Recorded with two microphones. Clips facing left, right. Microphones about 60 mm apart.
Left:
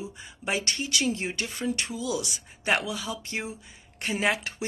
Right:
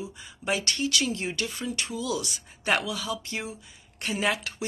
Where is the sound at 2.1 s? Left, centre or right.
Centre.